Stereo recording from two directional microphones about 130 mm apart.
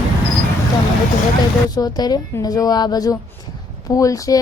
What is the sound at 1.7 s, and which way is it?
A woman's voice, 30° left (ahead or behind).